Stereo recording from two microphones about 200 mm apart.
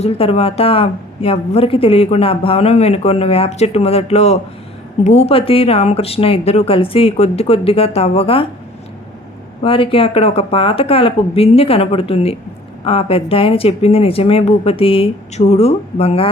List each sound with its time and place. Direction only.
0.0 s a woman's voice: 30° left (ahead or behind)
9.6 s a woman's voice: 25° left (ahead or behind)